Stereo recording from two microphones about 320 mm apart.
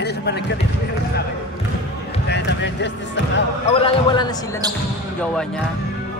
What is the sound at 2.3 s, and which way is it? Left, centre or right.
Speech, left.